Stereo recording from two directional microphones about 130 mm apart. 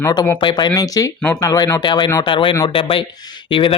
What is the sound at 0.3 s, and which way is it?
Speech, 35° left (ahead or behind).